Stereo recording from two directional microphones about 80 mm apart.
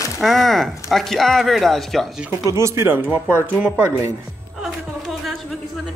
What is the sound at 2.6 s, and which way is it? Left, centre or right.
Speech, right.